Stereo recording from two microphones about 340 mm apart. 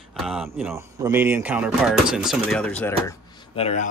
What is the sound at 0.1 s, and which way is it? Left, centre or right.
Speech, centre.